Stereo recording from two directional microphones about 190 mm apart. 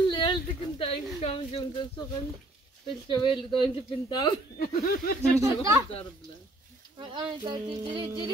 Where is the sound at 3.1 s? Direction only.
25° left (ahead or behind).